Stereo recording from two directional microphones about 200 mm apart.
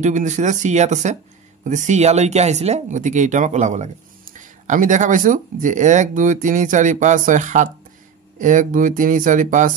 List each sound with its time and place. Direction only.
0.0 s speech: 35° right (ahead or behind)